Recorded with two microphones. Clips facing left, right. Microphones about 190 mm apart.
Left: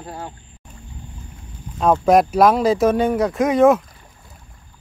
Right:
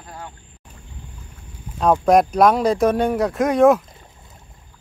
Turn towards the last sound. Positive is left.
turn(degrees=0)  # may be behind; listen again after turning